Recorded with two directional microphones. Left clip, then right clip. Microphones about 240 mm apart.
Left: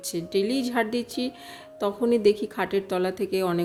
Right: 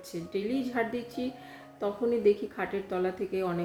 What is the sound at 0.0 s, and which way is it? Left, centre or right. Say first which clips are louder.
Speech: left 8 dB; left.